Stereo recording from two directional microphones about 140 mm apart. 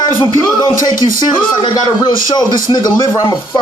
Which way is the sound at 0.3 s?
30° left (ahead or behind).